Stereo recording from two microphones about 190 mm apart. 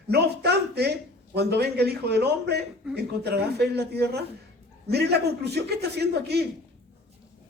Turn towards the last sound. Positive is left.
turn(degrees=-60)  # may be behind; listen again after turning